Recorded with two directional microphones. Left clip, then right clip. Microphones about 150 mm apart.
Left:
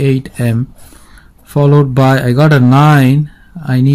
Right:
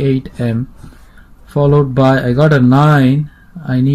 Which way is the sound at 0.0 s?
35° left (ahead or behind).